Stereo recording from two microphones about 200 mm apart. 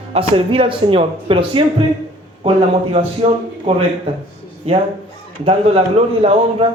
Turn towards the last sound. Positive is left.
turn(degrees=-30)  # may be behind; listen again after turning